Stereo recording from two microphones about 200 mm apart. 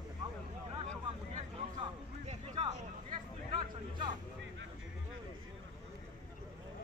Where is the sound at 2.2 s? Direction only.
35° right (ahead or behind).